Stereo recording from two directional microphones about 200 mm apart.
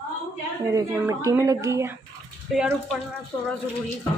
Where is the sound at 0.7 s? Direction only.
15° right (ahead or behind).